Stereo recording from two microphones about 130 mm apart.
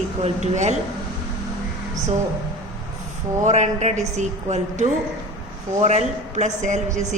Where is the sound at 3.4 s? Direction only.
60° right (ahead or behind).